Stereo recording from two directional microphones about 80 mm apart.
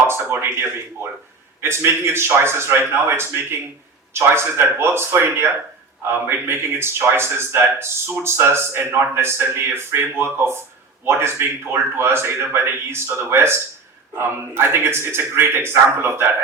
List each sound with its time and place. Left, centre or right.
0.1 s speech: right